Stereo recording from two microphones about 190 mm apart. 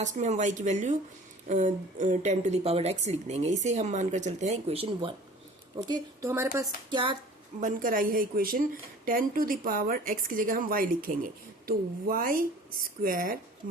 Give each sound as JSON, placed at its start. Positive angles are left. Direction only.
{"t": 0.0, "sound": "speech", "side_deg": -40}
{"t": 5.7, "sound": "a woman's voice", "side_deg": -20}
{"t": 6.9, "sound": "music", "side_deg": -25}
{"t": 7.6, "sound": "speech", "side_deg": -45}